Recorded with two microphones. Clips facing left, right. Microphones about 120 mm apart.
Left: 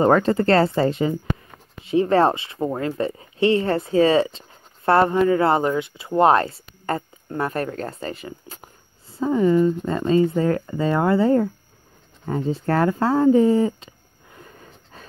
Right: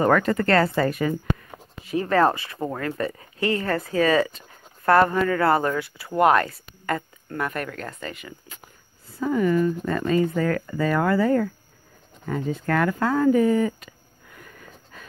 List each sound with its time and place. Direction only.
0.0 s speech: 30° left (ahead or behind)
9.0 s speech: 25° left (ahead or behind)
14.3 s a sound: 30° left (ahead or behind)